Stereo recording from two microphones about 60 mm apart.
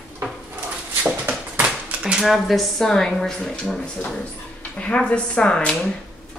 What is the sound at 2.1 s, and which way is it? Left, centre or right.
A woman's voice, centre.